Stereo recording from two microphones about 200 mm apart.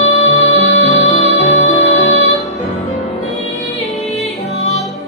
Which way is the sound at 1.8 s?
70° left (ahead or behind).